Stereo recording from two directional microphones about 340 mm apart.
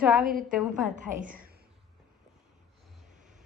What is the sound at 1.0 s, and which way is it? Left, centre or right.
Speech, right.